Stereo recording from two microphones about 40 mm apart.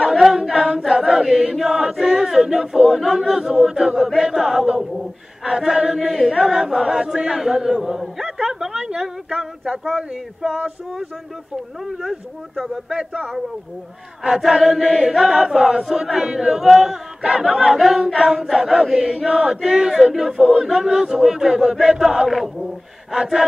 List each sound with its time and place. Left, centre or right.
0.0 s choir: centre
3.1 s chant: centre
4.2 s speech: centre
5.4 s chant: centre
8.2 s speech: centre
10.4 s speech: centre
12.9 s speech: right
14.2 s chant: centre
21.7 s speech: centre
23.1 s chant: centre